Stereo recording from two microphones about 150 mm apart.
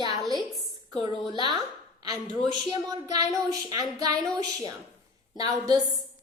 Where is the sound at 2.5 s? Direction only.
25° right (ahead or behind).